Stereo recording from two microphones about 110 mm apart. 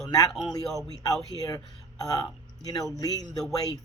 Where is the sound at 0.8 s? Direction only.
30° left (ahead or behind).